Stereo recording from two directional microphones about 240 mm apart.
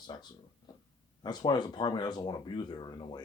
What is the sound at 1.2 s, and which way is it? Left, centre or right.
Speech, centre.